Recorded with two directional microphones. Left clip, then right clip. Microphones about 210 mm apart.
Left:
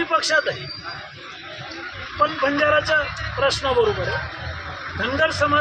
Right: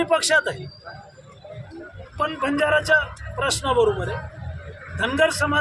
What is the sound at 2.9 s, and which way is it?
Speech, 25° right (ahead or behind).